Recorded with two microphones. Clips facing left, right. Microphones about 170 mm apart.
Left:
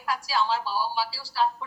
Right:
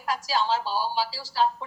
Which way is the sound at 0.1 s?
20° right (ahead or behind).